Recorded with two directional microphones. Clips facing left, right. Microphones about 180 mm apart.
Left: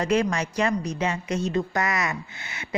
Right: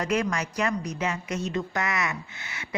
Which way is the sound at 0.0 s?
25° left (ahead or behind).